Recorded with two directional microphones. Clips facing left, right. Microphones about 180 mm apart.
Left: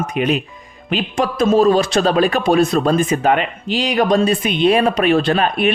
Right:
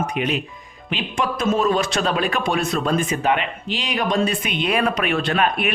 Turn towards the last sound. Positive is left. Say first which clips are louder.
# left 5 dB
turn(degrees=35)  # may be behind; listen again after turning